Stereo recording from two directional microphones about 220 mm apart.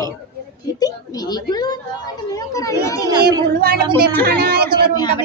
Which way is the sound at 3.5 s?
40° right (ahead or behind).